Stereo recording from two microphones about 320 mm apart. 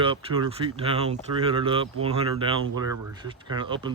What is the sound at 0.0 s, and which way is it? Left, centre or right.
Speech, centre.